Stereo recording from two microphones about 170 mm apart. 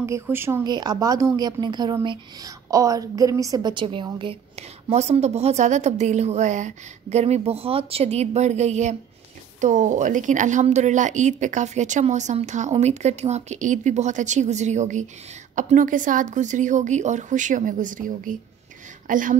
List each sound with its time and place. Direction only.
0.0 s a woman's voice: 15° right (ahead or behind); by 19.3 s 50° right (ahead or behind)